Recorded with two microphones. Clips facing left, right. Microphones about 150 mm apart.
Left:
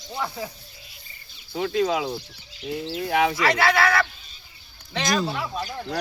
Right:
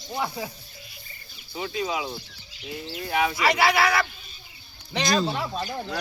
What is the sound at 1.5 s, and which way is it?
Speech, 65° left (ahead or behind).